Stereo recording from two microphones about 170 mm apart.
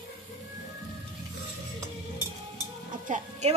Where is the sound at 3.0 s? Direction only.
45° right (ahead or behind).